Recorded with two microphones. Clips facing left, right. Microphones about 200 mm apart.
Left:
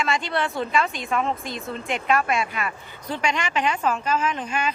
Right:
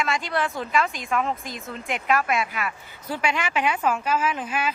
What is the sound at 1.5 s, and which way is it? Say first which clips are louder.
Speech: left 4 dB; 35° left (ahead or behind).